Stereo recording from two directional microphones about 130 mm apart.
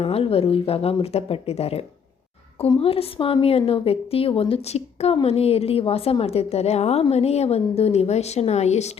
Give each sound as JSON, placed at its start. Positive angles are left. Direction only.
{"t": 0.0, "sound": "a woman's voice", "side_deg": 50}